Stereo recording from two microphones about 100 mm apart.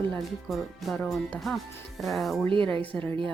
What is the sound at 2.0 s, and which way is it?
Speech, centre (ahead or behind).